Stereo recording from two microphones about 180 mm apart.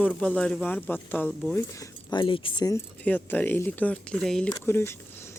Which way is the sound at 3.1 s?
10° left (ahead or behind).